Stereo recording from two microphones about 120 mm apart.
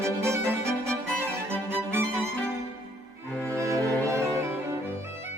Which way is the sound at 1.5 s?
20° right (ahead or behind).